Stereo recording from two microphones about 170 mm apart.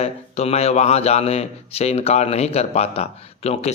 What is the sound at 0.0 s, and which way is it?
Speech, 40° left (ahead or behind).